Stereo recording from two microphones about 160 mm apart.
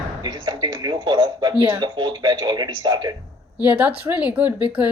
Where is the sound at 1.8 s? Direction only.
30° right (ahead or behind).